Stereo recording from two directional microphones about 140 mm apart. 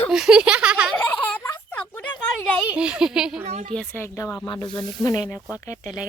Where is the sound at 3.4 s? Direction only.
50° right (ahead or behind).